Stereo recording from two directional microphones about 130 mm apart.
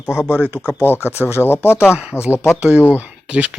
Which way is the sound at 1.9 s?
10° right (ahead or behind).